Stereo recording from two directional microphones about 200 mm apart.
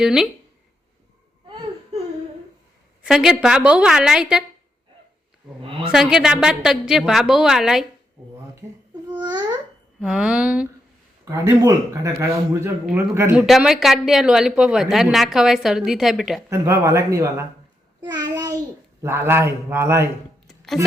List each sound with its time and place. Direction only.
0.0 s a woman's voice: centre (ahead or behind)
1.5 s whimper: 25° right (ahead or behind)
3.0 s a woman's voice: 5° right (ahead or behind)
5.6 s a sound: 25° right (ahead or behind)
5.9 s a woman's voice: centre (ahead or behind)
9.1 s babbling: 20° right (ahead or behind)
10.0 s a woman's voice: 5° right (ahead or behind)
16.5 s speech: 15° right (ahead or behind)
18.0 s child singing: 20° right (ahead or behind)
19.0 s speech: 10° right (ahead or behind)